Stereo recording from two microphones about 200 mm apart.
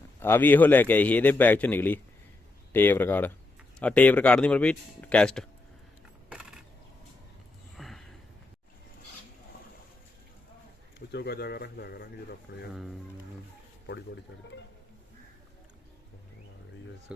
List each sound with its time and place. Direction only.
0.2 s a man's voice: 10° left (ahead or behind)
6.2 s a sound: 5° right (ahead or behind)
7.8 s a sound: centre (ahead or behind)
11.1 s speech: 55° left (ahead or behind)
12.7 s speech: centre (ahead or behind)
17.1 s speech: 5° right (ahead or behind)